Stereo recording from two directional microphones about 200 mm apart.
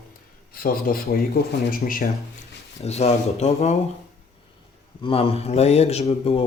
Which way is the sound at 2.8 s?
30° left (ahead or behind).